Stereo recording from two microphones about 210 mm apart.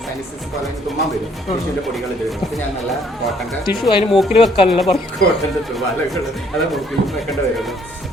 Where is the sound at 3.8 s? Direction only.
Centre (ahead or behind).